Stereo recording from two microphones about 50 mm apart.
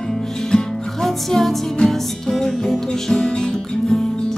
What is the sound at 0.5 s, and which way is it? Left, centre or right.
Music, centre.